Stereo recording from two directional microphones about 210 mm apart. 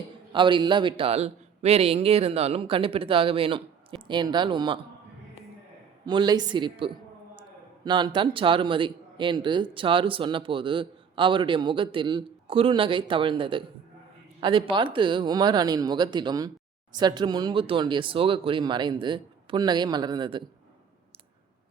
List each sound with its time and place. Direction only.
0.3 s a man's voice: 25° right (ahead or behind)
6.1 s a man's voice: 20° right (ahead or behind)